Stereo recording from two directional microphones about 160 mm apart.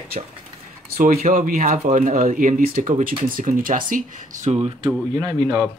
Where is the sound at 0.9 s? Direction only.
60° right (ahead or behind).